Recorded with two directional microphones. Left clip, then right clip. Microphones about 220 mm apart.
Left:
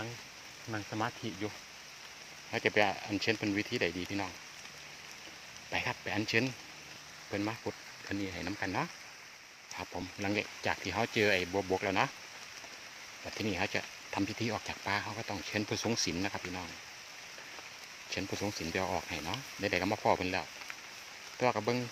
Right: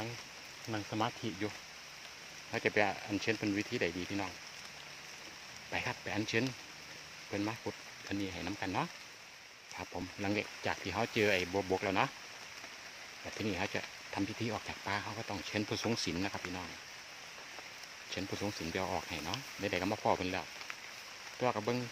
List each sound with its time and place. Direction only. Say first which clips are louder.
0.7 s speech: even; centre (ahead or behind)
2.5 s speech: left 2 dB; 10° left (ahead or behind)
5.7 s speech: left 3 dB; 10° left (ahead or behind)
13.4 s speech: left 3 dB; 10° left (ahead or behind)
18.1 s speech: left 3 dB; 10° left (ahead or behind)
21.4 s speech: left 3 dB; 15° left (ahead or behind)